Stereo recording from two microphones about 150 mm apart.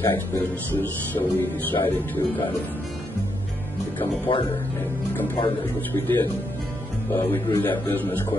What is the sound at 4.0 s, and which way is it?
Speech, 35° left (ahead or behind).